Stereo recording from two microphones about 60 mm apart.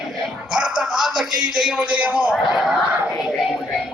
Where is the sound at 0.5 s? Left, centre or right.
Centre.